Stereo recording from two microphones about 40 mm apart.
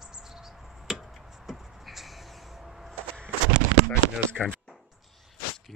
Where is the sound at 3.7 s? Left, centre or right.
Right.